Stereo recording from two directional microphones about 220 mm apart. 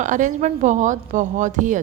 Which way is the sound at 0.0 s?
35° right (ahead or behind).